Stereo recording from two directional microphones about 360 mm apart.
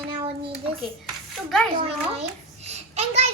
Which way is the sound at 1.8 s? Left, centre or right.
Centre.